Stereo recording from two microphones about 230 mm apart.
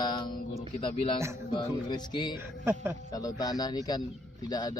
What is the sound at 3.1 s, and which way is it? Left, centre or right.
Speech, centre.